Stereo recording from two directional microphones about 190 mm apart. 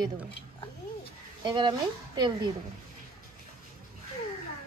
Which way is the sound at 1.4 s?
25° right (ahead or behind).